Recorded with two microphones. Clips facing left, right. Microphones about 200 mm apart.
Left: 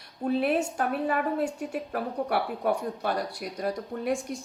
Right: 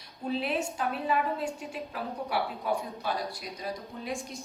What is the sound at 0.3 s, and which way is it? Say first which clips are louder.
Speech: left 5 dB; 55° left (ahead or behind).